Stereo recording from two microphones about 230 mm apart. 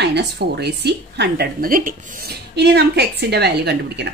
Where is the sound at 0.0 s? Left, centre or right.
Right.